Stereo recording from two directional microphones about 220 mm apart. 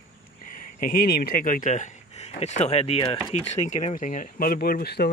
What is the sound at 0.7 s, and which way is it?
Speech, 40° left (ahead or behind).